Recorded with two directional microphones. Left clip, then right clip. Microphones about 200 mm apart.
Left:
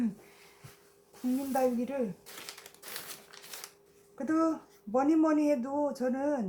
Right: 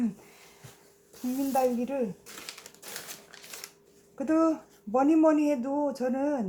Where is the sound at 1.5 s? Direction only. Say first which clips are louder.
Right 3 dB; 10° right (ahead or behind).